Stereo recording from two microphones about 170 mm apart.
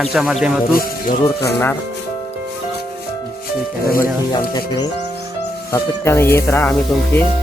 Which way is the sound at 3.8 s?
60° left (ahead or behind).